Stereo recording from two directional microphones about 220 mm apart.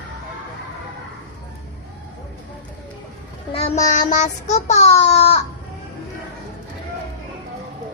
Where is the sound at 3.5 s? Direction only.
25° left (ahead or behind).